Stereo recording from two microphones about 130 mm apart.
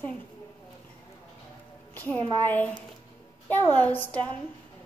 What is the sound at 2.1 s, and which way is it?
Speech, 35° right (ahead or behind).